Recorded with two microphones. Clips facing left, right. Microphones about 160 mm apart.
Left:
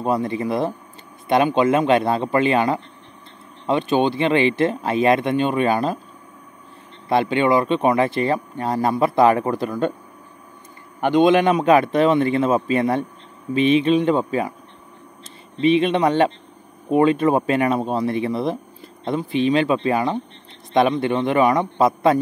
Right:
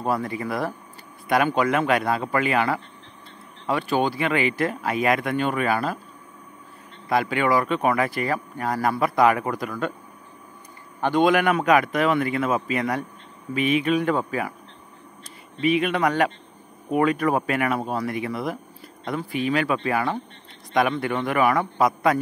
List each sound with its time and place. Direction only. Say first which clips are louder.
0.0 s speech: left 4 dB; 20° left (ahead or behind)
7.1 s speech: left 4 dB; 25° left (ahead or behind)
11.0 s speech: left 4 dB; 20° left (ahead or behind)
15.6 s speech: left 5 dB; 25° left (ahead or behind)